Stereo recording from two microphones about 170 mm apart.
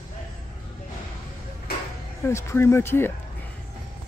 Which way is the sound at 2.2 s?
15° left (ahead or behind).